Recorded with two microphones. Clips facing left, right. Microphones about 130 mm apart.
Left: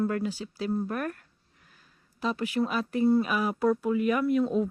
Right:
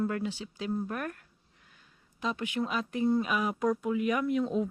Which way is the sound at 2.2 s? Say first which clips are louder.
Left 4 dB; 35° left (ahead or behind).